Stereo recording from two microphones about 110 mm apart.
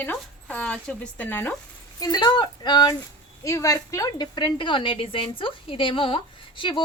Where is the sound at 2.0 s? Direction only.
35° left (ahead or behind).